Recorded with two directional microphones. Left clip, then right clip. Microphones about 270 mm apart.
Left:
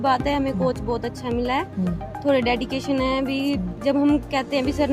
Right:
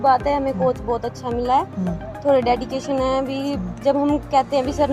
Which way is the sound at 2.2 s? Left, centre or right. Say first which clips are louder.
Right 3 dB; left.